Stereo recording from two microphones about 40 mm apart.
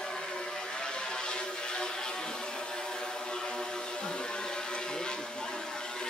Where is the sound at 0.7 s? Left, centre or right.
Centre.